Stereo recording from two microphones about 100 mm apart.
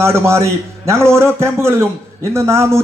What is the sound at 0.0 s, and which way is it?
A man's voice, 25° right (ahead or behind).